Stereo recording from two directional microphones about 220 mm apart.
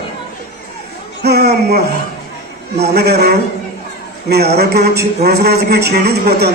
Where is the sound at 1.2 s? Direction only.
45° right (ahead or behind).